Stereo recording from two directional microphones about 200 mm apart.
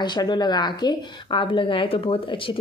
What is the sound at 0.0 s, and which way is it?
Speech, 20° left (ahead or behind).